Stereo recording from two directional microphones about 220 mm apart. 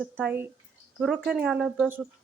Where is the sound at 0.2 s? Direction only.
10° right (ahead or behind).